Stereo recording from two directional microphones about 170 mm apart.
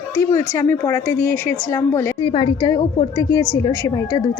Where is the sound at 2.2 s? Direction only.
30° left (ahead or behind).